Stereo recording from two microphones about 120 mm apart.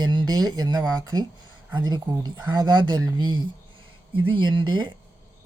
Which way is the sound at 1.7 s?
40° right (ahead or behind).